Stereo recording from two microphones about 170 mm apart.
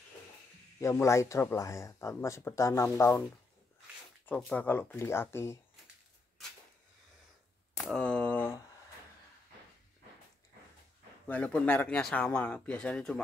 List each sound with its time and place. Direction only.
0.7 s speech: 15° left (ahead or behind)
4.4 s speech: 5° left (ahead or behind)
7.8 s speech: 5° left (ahead or behind)
11.2 s speech: 10° left (ahead or behind)